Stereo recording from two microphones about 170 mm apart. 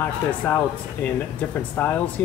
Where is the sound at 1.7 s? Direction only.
10° left (ahead or behind).